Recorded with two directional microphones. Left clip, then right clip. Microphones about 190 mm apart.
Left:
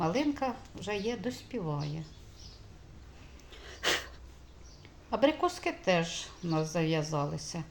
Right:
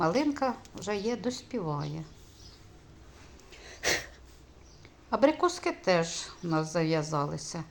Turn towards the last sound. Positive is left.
turn(degrees=-5)  # may be behind; listen again after turning